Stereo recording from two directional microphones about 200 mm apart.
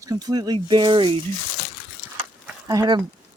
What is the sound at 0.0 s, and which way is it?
Speech, 20° right (ahead or behind).